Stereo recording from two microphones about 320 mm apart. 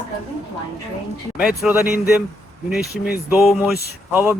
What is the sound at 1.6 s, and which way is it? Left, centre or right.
Speech, centre.